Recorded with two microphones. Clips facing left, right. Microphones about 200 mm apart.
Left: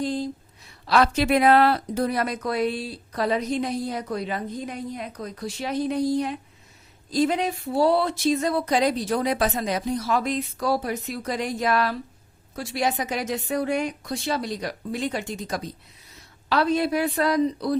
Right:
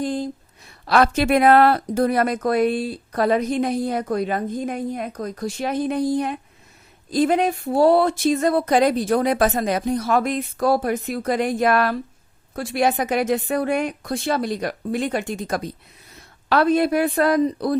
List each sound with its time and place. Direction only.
0.0 s a woman's voice: 50° right (ahead or behind)